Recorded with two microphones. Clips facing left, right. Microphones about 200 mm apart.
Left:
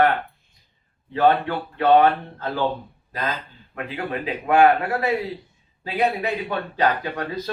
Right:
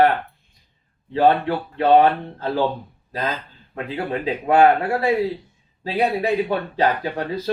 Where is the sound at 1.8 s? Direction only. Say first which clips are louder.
Right 1 dB; 30° right (ahead or behind).